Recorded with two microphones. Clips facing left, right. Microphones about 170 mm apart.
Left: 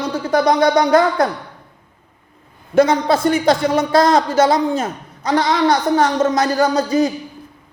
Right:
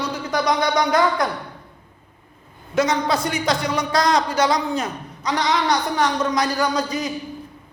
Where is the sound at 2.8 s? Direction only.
55° left (ahead or behind).